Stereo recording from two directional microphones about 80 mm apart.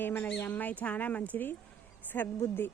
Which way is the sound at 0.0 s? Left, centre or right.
Left.